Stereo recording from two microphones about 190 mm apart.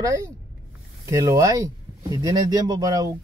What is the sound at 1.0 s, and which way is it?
Speech, 15° right (ahead or behind).